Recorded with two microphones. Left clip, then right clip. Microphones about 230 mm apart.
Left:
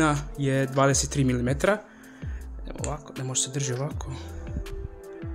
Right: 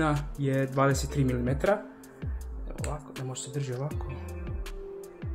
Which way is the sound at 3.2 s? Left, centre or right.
Left.